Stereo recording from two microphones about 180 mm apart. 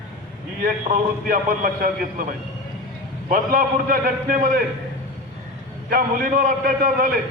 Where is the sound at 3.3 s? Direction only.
50° right (ahead or behind).